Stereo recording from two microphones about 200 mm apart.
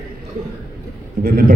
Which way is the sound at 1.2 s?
50° right (ahead or behind).